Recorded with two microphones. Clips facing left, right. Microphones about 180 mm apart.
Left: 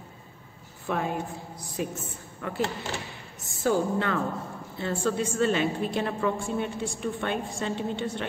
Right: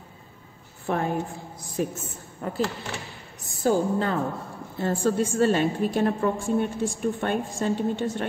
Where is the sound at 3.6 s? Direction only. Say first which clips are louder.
Right 2 dB; 35° right (ahead or behind).